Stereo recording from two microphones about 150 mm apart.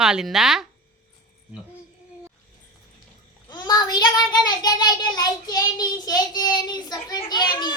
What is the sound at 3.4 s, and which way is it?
Child singing, 25° left (ahead or behind).